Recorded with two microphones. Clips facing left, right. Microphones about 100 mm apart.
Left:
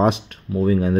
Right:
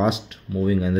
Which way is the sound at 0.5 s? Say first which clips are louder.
Left 3 dB; 40° left (ahead or behind).